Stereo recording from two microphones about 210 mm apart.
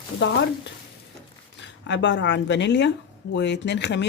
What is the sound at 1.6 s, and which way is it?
Speech, 60° left (ahead or behind).